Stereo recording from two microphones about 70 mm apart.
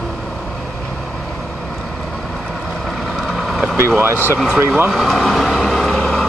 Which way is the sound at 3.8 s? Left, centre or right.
Right.